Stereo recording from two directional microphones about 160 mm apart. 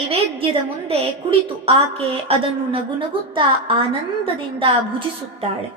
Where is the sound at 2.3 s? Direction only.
35° right (ahead or behind).